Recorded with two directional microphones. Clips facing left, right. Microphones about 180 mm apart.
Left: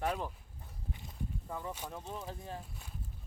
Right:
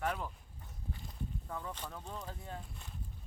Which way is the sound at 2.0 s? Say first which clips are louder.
Left 2 dB; 5° left (ahead or behind).